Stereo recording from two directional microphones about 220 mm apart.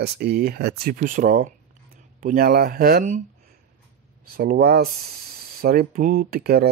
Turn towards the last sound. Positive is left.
turn(degrees=-45)  # may be behind; listen again after turning